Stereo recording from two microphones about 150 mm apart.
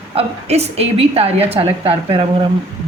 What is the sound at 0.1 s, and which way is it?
A woman's voice, 40° right (ahead or behind).